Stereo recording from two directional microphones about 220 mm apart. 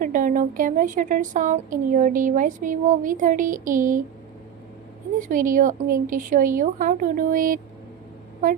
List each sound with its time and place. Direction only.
0.0 s a woman's voice: 35° right (ahead or behind)
5.3 s a woman's voice: 35° right (ahead or behind)